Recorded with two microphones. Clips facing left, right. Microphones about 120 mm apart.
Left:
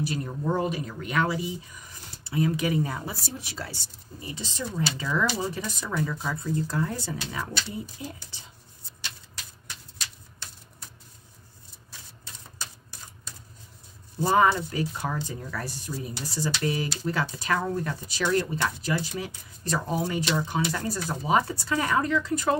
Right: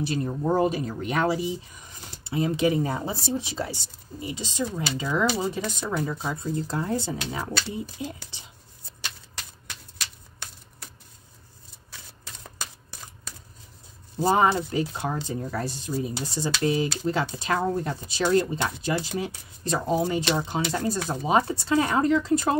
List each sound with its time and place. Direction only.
0.0 s speech: 30° right (ahead or behind)
1.9 s speech: 20° right (ahead or behind)
9.9 s a sound: 75° right (ahead or behind)
14.2 s speech: 25° right (ahead or behind)